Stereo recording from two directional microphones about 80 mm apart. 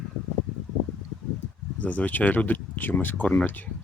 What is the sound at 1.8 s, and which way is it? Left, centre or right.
Speech, centre.